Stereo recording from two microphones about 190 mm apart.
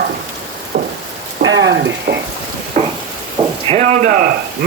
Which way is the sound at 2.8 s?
35° right (ahead or behind).